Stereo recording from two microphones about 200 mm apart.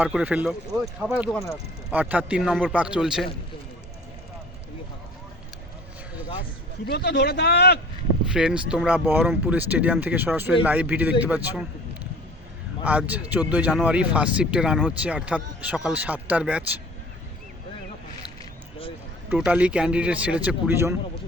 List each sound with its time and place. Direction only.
0.0 s a man's voice: 5° right (ahead or behind)
1.3 s speech: 15° left (ahead or behind)
1.9 s a man's voice: 10° right (ahead or behind)
6.8 s a man's voice: 55° left (ahead or behind)
8.3 s speech: 5° right (ahead or behind)
12.8 s speech: 5° right (ahead or behind)
19.3 s speech: 5° right (ahead or behind)